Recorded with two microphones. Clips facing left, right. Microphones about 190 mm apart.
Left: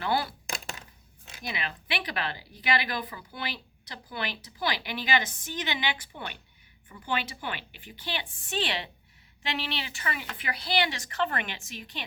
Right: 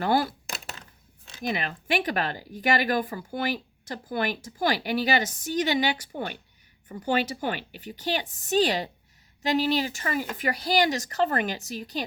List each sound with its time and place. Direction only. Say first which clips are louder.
0.0 s speech: right 5 dB; 45° right (ahead or behind)
1.4 s a woman's voice: right 7 dB; 45° right (ahead or behind)